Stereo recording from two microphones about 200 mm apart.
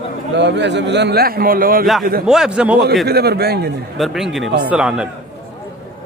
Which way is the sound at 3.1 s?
50° right (ahead or behind).